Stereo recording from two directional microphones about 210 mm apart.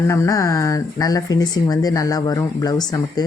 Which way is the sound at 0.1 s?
15° left (ahead or behind).